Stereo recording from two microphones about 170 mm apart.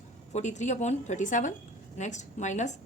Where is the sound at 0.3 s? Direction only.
45° left (ahead or behind).